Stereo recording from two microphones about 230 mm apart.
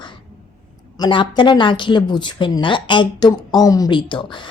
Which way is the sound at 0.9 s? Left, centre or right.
Centre.